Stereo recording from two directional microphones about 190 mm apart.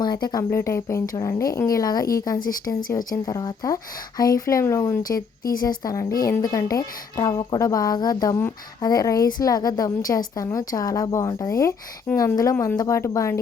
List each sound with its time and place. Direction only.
0.0 s speech: 20° left (ahead or behind)